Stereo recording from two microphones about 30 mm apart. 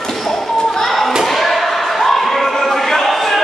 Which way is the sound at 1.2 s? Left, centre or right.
Centre.